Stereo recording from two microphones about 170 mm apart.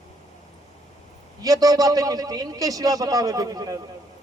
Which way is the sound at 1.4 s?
20° right (ahead or behind).